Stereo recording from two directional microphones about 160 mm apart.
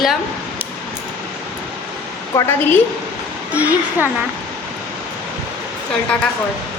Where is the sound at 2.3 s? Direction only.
20° left (ahead or behind).